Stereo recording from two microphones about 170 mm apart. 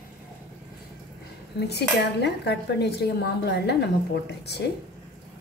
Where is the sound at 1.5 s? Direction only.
80° left.